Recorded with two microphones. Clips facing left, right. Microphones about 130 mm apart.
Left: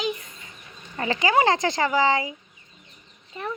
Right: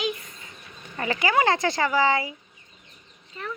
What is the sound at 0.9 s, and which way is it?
Speech, 30° left (ahead or behind).